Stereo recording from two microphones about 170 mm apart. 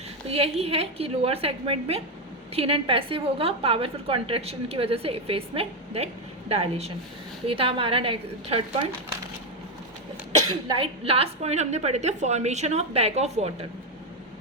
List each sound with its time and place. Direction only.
0.3 s a woman's voice: 35° right (ahead or behind)
10.5 s a woman's voice: 35° right (ahead or behind)